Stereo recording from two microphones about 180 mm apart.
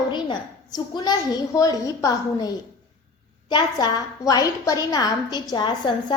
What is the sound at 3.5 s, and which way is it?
A child's voice, 20° left (ahead or behind).